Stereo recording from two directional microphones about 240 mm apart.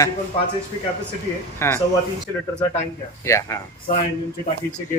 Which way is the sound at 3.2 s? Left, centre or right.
Centre.